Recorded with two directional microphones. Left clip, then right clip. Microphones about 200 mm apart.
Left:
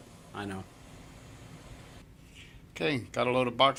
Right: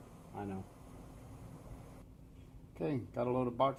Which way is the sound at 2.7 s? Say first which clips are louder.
Left 8 dB; 20° left (ahead or behind).